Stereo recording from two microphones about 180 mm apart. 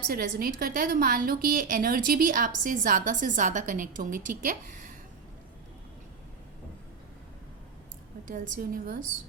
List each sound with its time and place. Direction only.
0.1 s a woman's voice: 55° right (ahead or behind)
8.3 s a woman's voice: 50° right (ahead or behind)